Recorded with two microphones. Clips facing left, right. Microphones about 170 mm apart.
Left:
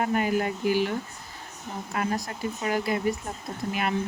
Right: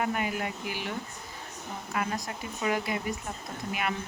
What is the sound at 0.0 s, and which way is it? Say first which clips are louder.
Speech: left 5 dB; 35° left (ahead or behind).